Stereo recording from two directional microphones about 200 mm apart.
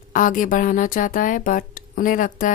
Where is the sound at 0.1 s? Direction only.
40° left (ahead or behind).